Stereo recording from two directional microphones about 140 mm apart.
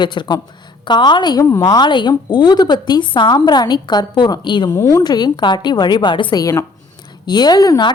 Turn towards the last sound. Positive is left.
turn(degrees=25)  # may be behind; listen again after turning